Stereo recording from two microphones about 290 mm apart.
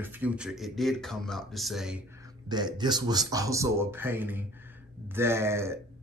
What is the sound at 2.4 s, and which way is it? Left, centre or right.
Speech, centre.